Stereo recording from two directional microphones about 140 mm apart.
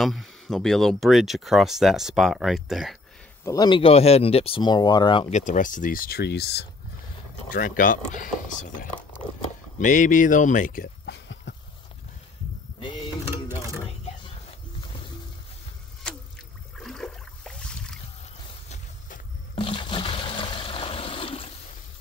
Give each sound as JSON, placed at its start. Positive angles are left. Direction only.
{"t": 0.0, "sound": "speech", "side_deg": 0}
{"t": 3.4, "sound": "speech", "side_deg": 30}
{"t": 5.3, "sound": "speech", "side_deg": 60}
{"t": 7.4, "sound": "speech", "side_deg": 80}
{"t": 12.8, "sound": "mechanisms", "side_deg": 35}
{"t": 16.8, "sound": "a sound", "side_deg": 5}
{"t": 18.7, "sound": "vehicle", "side_deg": 70}
{"t": 19.5, "sound": "water", "side_deg": 40}